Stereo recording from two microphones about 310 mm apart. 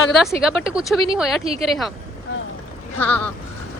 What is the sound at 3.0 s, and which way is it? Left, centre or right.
Speech, centre.